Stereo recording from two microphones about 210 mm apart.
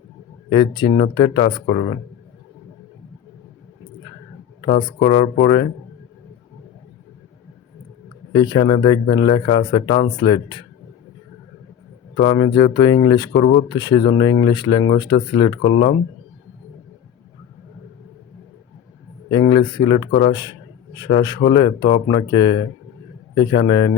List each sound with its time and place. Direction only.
0.5 s a man's voice: 25° left (ahead or behind)
4.6 s a man's voice: 20° left (ahead or behind)
8.3 s a man's voice: 20° left (ahead or behind)
12.1 s a man's voice: 20° left (ahead or behind)
19.3 s a man's voice: 20° left (ahead or behind)